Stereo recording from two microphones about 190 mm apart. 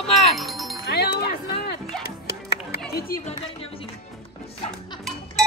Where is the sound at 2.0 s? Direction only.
60° left (ahead or behind).